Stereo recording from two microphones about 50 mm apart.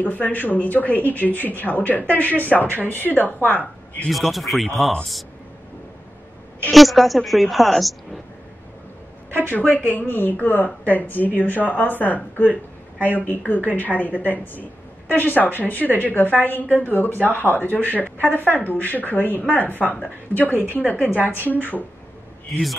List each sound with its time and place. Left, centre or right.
0.0 s speech: left
4.1 s a woman's voice: centre
6.7 s a woman's voice: centre
9.8 s speech: left